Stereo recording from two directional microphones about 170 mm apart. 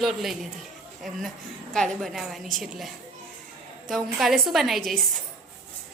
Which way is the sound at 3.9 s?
Centre (ahead or behind).